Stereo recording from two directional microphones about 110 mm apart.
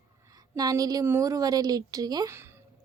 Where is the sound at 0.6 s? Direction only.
35° right (ahead or behind).